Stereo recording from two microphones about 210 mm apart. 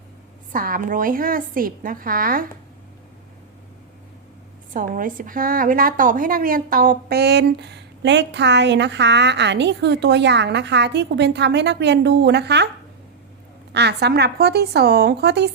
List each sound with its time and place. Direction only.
0.5 s a woman's voice: 40° right (ahead or behind)
4.7 s a woman's voice: 40° right (ahead or behind)
13.7 s a woman's voice: 55° right (ahead or behind)